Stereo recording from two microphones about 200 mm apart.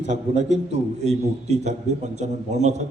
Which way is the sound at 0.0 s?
35° right (ahead or behind).